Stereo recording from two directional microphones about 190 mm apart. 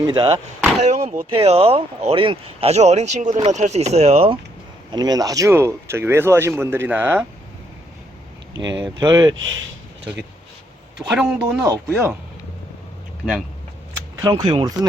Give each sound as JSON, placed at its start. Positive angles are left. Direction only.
{"t": 0.0, "sound": "speech", "side_deg": -20}
{"t": 0.8, "sound": "speech", "side_deg": -35}
{"t": 4.9, "sound": "speech", "side_deg": -20}
{"t": 8.8, "sound": "speech", "side_deg": -20}
{"t": 11.2, "sound": "speech", "side_deg": -5}
{"t": 11.6, "sound": "speech", "side_deg": -15}
{"t": 14.2, "sound": "speech", "side_deg": -20}